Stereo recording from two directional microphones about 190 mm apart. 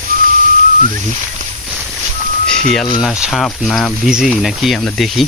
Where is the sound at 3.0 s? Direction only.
5° right (ahead or behind).